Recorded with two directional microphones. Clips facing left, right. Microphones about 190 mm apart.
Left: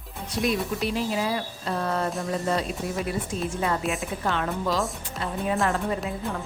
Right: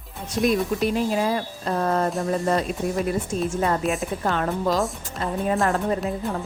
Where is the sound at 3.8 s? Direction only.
Centre (ahead or behind).